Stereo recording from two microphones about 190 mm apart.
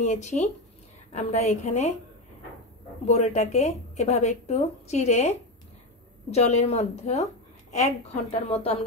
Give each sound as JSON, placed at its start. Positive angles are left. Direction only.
{"t": 0.0, "sound": "speech", "side_deg": 35}
{"t": 3.1, "sound": "speech", "side_deg": 35}
{"t": 6.3, "sound": "speech", "side_deg": 35}